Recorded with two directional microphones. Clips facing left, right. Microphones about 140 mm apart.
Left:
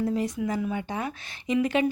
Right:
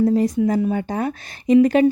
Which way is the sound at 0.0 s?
35° right (ahead or behind).